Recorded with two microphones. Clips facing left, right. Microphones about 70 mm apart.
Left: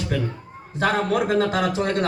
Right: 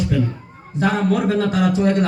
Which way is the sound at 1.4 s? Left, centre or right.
Left.